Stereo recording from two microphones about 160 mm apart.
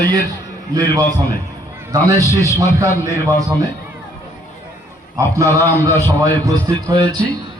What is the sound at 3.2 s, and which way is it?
Speech, 20° right (ahead or behind).